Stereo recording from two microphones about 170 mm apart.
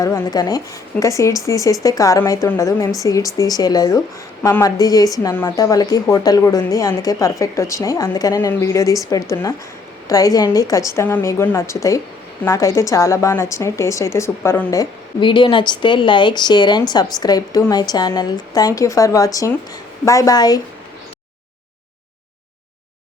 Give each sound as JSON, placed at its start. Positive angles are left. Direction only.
{"t": 0.0, "sound": "a woman's voice", "side_deg": 20}
{"t": 14.8, "sound": "a woman's voice", "side_deg": 30}